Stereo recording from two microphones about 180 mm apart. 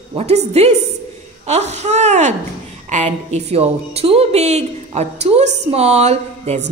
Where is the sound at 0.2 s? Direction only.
35° right (ahead or behind).